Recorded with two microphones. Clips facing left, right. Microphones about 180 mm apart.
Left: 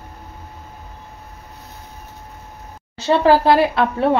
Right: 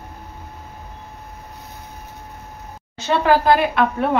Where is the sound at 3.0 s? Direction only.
30° left (ahead or behind).